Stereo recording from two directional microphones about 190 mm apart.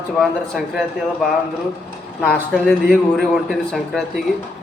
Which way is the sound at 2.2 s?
5° left (ahead or behind).